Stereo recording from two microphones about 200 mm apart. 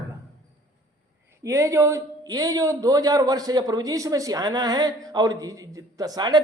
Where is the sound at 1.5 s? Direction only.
15° right (ahead or behind).